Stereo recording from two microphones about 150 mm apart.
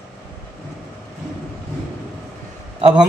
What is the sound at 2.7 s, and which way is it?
Speech, 35° right (ahead or behind).